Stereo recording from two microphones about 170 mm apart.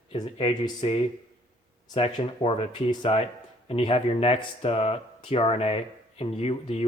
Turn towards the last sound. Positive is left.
turn(degrees=35)  # may be behind; listen again after turning